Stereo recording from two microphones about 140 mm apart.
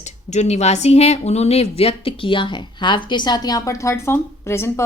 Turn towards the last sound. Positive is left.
turn(degrees=20)  # may be behind; listen again after turning